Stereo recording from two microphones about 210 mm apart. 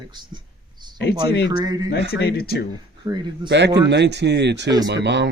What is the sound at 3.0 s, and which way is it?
Speech, 20° right (ahead or behind).